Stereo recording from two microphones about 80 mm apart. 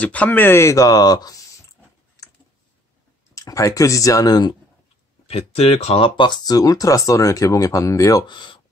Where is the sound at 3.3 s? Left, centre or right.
Left.